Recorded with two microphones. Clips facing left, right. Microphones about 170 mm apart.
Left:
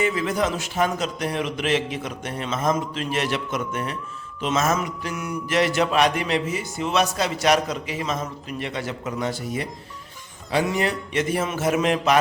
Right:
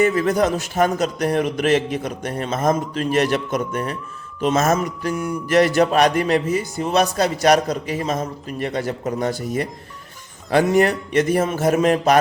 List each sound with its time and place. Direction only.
0.0 s a man's voice: 45° right (ahead or behind)
4.4 s mantra: 40° right (ahead or behind)
10.5 s a man's voice: 50° right (ahead or behind)